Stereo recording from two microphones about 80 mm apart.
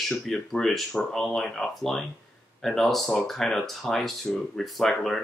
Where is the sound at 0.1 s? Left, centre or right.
Centre.